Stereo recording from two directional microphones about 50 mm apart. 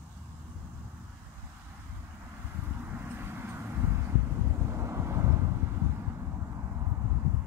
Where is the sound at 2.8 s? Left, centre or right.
Right.